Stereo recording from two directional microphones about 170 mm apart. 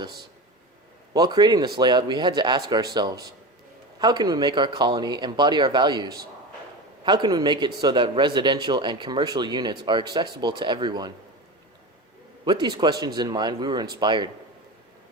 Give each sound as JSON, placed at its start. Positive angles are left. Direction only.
{"t": 1.1, "sound": "speech", "side_deg": -25}
{"t": 12.5, "sound": "speech", "side_deg": -25}